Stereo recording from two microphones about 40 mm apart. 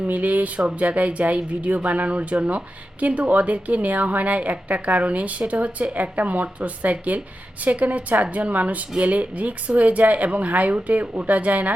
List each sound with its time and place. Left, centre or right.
0.1 s speech: right